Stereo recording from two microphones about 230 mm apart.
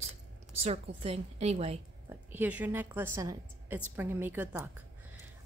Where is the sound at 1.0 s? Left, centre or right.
Right.